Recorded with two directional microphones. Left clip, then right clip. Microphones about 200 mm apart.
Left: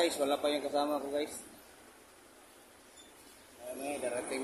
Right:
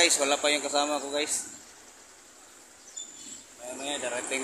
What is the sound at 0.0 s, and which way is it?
A man's voice, 10° right (ahead or behind).